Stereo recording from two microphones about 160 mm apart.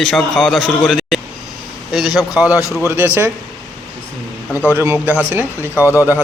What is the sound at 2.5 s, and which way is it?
Speech, 20° left (ahead or behind).